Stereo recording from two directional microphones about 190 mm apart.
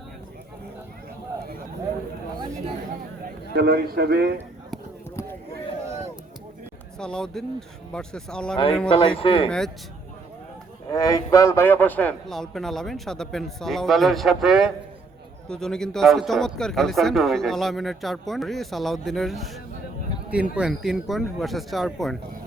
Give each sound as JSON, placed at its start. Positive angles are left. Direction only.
{"t": 3.5, "sound": "speech", "side_deg": -55}
{"t": 7.0, "sound": "speech", "side_deg": 5}
{"t": 8.9, "sound": "speech", "side_deg": 30}
{"t": 9.5, "sound": "speech", "side_deg": 0}
{"t": 10.9, "sound": "speech", "side_deg": 20}